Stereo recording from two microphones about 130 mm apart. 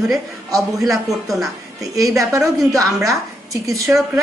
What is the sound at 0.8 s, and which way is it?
Speech, centre (ahead or behind).